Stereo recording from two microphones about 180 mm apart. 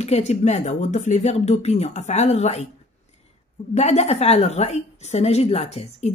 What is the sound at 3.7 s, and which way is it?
Speech, 35° left (ahead or behind).